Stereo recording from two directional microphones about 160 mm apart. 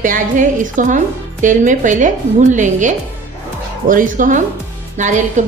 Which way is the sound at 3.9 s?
55° right (ahead or behind).